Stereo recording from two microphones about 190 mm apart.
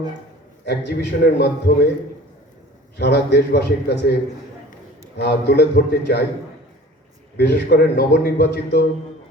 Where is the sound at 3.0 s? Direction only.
60° left (ahead or behind).